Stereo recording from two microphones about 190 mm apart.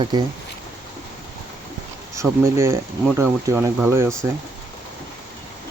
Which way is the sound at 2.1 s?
15° right (ahead or behind).